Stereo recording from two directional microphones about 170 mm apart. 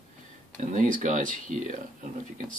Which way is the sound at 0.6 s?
50° right (ahead or behind).